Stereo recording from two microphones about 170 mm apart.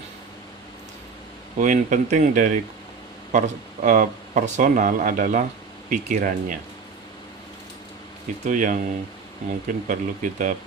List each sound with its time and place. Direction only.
1.5 s speech: 50° right (ahead or behind)
8.4 s speech: 50° right (ahead or behind)